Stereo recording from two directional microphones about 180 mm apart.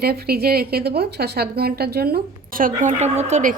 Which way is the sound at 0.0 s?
60° right (ahead or behind).